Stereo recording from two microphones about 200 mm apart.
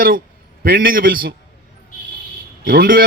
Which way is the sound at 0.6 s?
45° right (ahead or behind).